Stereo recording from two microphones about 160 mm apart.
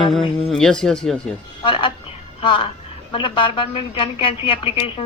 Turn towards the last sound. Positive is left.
turn(degrees=35)  # may be behind; listen again after turning